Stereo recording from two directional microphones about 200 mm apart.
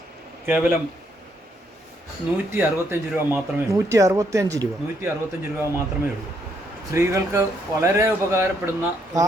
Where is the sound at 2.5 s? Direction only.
10° right (ahead or behind).